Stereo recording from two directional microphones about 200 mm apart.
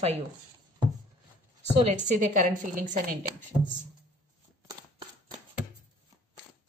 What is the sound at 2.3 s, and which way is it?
A woman's voice, 40° right (ahead or behind).